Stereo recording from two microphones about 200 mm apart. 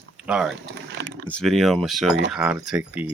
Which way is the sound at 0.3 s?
5° right (ahead or behind).